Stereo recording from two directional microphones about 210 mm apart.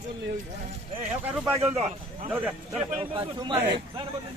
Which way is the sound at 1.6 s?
30° right (ahead or behind).